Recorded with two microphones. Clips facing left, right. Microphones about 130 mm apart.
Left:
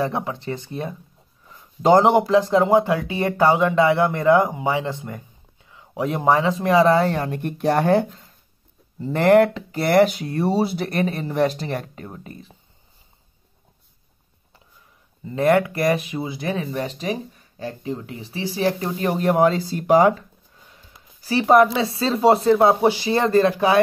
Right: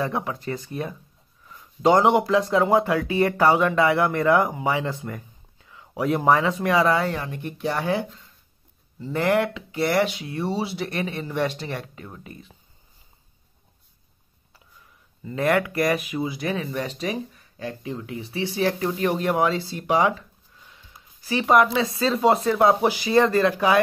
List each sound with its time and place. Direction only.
0.0 s speech: 25° left (ahead or behind)
7.1 s speech: 50° left (ahead or behind)
15.2 s speech: 25° left (ahead or behind)